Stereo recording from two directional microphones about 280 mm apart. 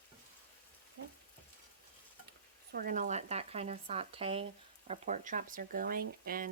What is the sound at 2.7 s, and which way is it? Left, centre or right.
Speech, right.